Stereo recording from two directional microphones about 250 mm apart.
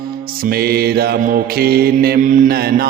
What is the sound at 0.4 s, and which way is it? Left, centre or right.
Mantra, right.